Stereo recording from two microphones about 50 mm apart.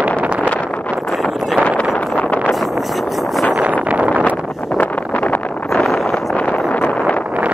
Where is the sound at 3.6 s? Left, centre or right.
Right.